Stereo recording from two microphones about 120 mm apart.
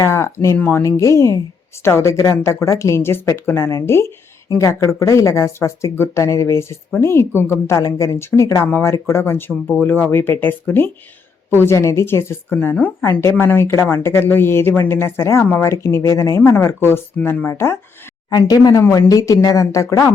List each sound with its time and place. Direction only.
0.0 s speech: 25° left (ahead or behind)
18.3 s speech: 35° left (ahead or behind)